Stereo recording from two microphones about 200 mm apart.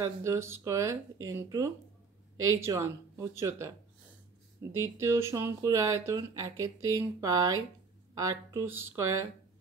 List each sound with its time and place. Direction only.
0.0 s speech: 15° right (ahead or behind)
4.7 s speech: 15° right (ahead or behind)